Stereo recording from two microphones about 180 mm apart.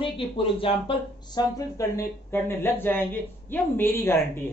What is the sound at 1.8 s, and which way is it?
Speech, 15° left (ahead or behind).